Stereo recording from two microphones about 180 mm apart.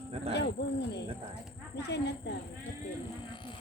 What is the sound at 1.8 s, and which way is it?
Speech, 70° left (ahead or behind).